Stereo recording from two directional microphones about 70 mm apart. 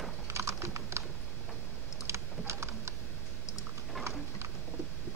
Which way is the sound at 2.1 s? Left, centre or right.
Right.